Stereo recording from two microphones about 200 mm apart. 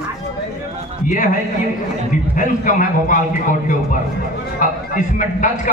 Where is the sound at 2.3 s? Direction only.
40° left (ahead or behind).